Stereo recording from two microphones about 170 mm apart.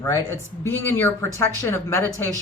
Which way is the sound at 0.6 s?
15° left (ahead or behind).